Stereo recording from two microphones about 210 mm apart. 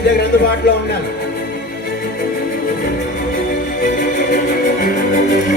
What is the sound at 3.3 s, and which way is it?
Music, 40° left (ahead or behind).